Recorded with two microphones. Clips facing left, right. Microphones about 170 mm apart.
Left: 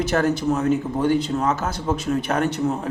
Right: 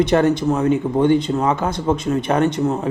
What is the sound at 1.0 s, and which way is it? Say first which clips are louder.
Speech: right 4 dB; 5° left (ahead or behind).